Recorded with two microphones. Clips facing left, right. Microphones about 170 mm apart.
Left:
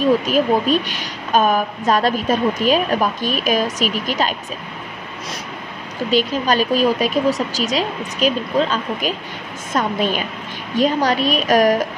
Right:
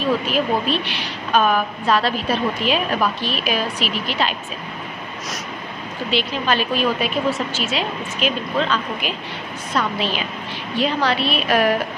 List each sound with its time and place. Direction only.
0.0 s a woman's voice: 45° left (ahead or behind)
6.0 s a woman's voice: 40° left (ahead or behind)